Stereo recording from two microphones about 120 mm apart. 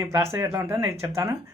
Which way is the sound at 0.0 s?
20° right (ahead or behind).